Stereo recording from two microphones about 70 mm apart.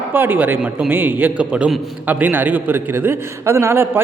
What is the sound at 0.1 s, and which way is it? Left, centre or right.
A man's voice, right.